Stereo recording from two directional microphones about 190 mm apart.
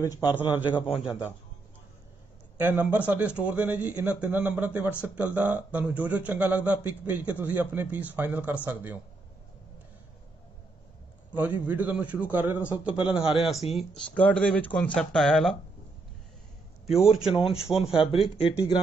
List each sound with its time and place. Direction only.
0.2 s speech: 10° right (ahead or behind)
2.5 s a man's voice: 10° right (ahead or behind)
11.3 s a man's voice: 10° right (ahead or behind)
16.8 s a man's voice: centre (ahead or behind)
17.3 s speech: 30° left (ahead or behind)